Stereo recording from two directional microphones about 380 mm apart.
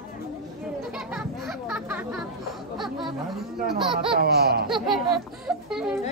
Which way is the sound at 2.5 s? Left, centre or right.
Centre.